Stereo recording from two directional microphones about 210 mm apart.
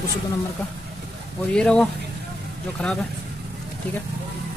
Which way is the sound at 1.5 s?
5° left (ahead or behind).